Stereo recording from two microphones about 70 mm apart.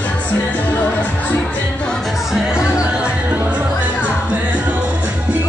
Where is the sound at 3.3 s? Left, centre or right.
Right.